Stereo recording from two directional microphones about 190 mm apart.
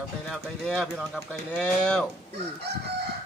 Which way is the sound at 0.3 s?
Centre (ahead or behind).